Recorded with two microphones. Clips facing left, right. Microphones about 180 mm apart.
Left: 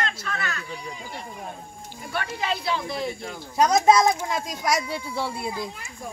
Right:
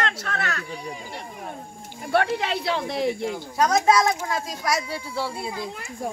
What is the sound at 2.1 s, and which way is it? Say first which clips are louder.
Speech: right 6 dB; 70° right (ahead or behind).